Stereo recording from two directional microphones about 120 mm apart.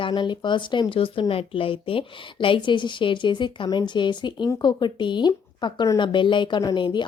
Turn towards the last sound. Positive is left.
turn(degrees=40)  # may be behind; listen again after turning